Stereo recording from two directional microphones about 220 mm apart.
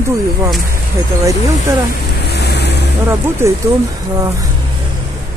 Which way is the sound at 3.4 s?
10° right (ahead or behind).